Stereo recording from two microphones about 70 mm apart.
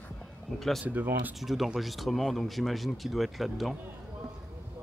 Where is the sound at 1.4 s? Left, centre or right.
Centre.